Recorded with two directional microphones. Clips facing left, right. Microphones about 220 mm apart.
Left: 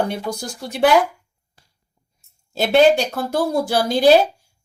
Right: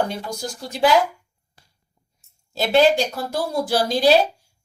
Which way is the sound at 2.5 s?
55° left (ahead or behind).